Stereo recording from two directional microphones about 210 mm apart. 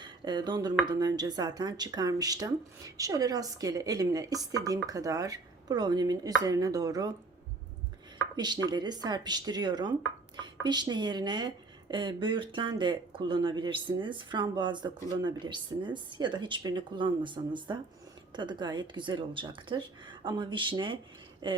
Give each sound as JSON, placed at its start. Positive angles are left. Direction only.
{"t": 0.0, "sound": "speech", "side_deg": -20}
{"t": 8.4, "sound": "speech", "side_deg": -20}